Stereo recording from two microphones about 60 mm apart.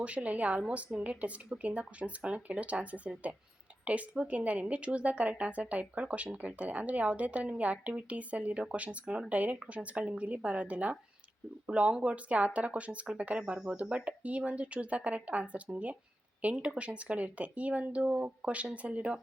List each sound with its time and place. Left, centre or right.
0.0 s speech: right
4.1 s speech: right